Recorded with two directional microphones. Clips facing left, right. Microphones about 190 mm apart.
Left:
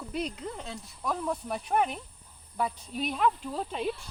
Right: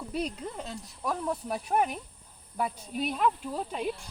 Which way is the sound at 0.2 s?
40° right (ahead or behind).